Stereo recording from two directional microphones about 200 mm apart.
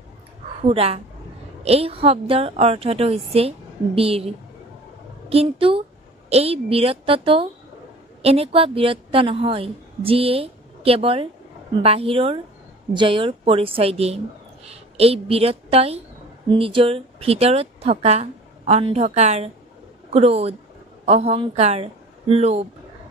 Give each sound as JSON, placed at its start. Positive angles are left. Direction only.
{"t": 0.6, "sound": "a woman's voice", "side_deg": -30}
{"t": 5.3, "sound": "a woman's voice", "side_deg": -30}